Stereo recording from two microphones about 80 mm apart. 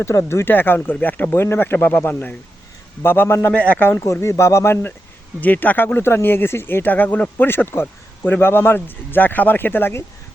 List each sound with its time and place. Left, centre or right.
0.0 s speech: left
3.5 s speech: centre
3.9 s speech: left